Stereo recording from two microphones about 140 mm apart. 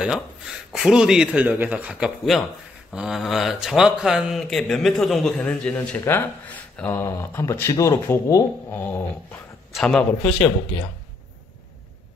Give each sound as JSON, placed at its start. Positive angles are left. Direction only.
{"t": 0.0, "sound": "a man's voice", "side_deg": -5}
{"t": 9.8, "sound": "a man's voice", "side_deg": 5}